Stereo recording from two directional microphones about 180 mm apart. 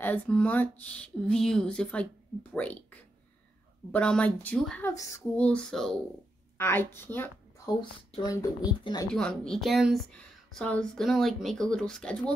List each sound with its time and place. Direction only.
0.0 s a woman's voice: 10° left (ahead or behind)
9.1 s speech: 5° left (ahead or behind)